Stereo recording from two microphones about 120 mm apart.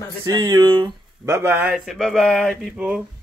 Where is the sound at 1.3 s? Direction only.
20° right (ahead or behind).